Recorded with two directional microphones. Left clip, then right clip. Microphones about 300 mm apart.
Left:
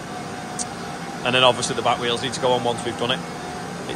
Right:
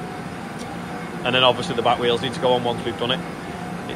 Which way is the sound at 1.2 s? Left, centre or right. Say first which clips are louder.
Left 1 dB; centre.